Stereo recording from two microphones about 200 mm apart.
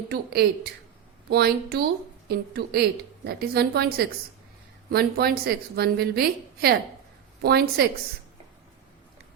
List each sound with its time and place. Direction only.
0.1 s a woman's voice: 55° right (ahead or behind)